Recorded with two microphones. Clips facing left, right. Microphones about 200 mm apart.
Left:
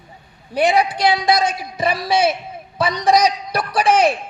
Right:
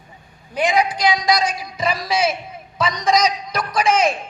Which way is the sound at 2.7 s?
30° left (ahead or behind).